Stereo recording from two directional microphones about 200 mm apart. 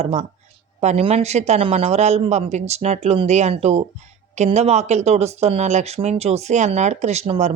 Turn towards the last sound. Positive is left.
turn(degrees=-35)  # may be behind; listen again after turning